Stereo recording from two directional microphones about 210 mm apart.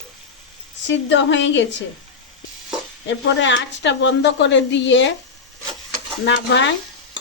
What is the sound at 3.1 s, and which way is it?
A woman's voice, 60° left (ahead or behind).